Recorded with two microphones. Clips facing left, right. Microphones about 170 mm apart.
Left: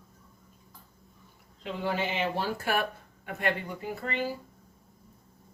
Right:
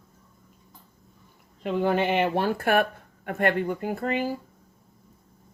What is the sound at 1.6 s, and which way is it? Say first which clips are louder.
Speech: right 7 dB; 55° right (ahead or behind).